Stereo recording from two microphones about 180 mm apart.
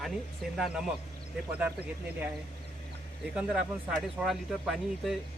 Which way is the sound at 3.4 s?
5° right (ahead or behind).